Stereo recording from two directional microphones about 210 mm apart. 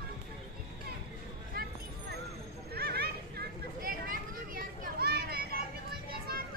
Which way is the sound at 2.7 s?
50° right (ahead or behind).